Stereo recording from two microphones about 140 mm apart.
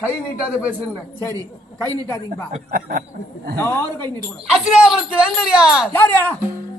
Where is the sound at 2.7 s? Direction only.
90° right.